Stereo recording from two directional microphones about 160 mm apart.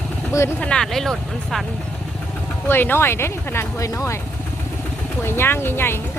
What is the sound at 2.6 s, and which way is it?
Speech, 15° left (ahead or behind).